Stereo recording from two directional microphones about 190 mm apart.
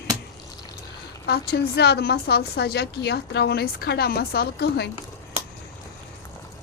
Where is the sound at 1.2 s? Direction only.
55° left (ahead or behind).